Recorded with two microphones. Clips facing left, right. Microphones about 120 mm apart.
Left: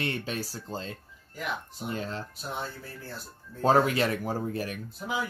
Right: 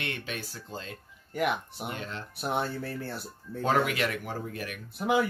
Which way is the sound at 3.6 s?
35° left (ahead or behind).